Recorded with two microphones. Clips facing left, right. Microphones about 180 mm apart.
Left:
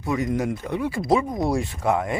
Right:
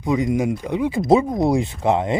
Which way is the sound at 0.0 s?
15° right (ahead or behind).